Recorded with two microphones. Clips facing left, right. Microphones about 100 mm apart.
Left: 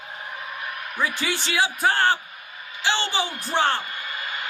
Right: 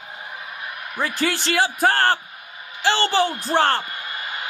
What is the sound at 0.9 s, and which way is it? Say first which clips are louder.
A man's voice: right 3 dB; 45° right (ahead or behind).